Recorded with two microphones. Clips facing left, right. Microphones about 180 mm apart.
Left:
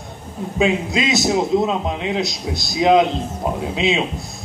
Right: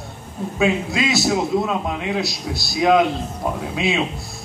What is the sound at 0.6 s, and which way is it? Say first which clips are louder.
A man's voice: left 1 dB; 20° left (ahead or behind).